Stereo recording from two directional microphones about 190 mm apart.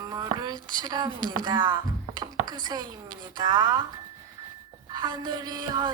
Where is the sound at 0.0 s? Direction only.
20° right (ahead or behind).